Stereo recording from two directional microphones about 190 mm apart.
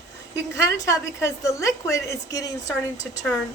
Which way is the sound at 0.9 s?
15° left (ahead or behind).